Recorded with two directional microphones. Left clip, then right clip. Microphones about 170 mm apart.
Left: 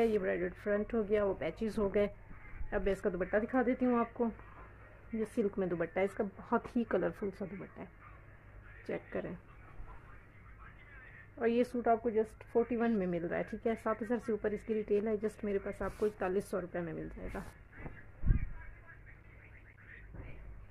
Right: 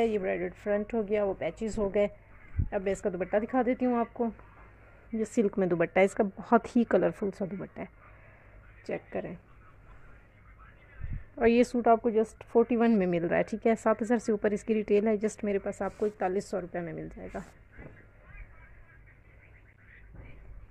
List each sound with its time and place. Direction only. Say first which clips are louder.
0.0 s speech: right 3 dB; 25° right (ahead or behind)
5.1 s a woman's voice: right 6 dB; 45° right (ahead or behind)
8.8 s speech: right 4 dB; 30° right (ahead or behind)
11.3 s a woman's voice: right 8 dB; 45° right (ahead or behind); by 17.5 s 25° right (ahead or behind)